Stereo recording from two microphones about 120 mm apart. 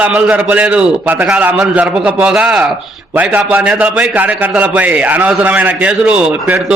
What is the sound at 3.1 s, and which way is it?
A man's voice, 15° right (ahead or behind).